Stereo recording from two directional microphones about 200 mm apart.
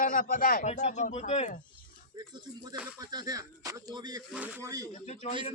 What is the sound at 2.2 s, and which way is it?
Speech, 20° right (ahead or behind).